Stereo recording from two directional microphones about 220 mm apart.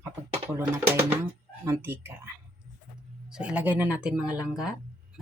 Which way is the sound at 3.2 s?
5° right (ahead or behind).